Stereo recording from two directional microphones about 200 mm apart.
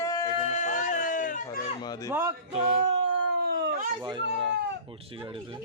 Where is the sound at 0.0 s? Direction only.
15° left (ahead or behind).